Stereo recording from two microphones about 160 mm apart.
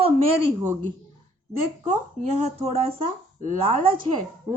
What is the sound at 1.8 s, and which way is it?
Speech, 45° right (ahead or behind).